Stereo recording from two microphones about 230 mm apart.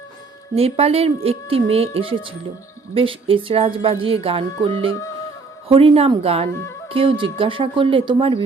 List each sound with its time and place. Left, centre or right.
0.5 s speech: right